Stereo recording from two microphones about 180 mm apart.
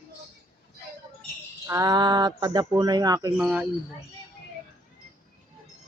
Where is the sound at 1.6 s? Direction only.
20° right (ahead or behind).